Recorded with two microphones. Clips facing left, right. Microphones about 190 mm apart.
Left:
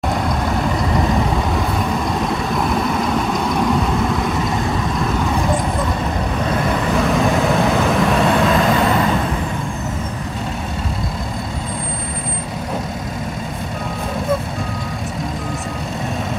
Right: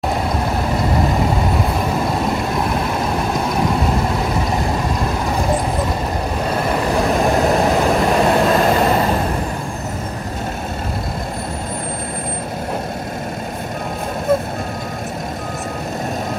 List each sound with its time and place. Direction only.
6.5 s vehicle: 35° right (ahead or behind)